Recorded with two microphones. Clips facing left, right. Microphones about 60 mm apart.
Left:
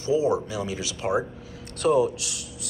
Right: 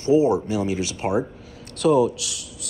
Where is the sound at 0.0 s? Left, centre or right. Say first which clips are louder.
Right 5 dB; right.